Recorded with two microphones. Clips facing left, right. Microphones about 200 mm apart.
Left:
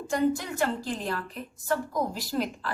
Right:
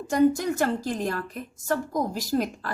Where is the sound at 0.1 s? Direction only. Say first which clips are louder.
Right 5 dB; 45° right (ahead or behind).